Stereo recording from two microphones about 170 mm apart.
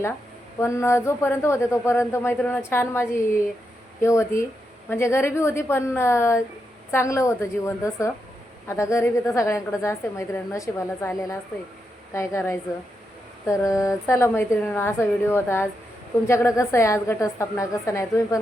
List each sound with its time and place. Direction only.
0.6 s a woman's voice: 15° left (ahead or behind)